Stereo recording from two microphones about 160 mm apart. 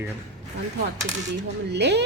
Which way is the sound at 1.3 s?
90° right.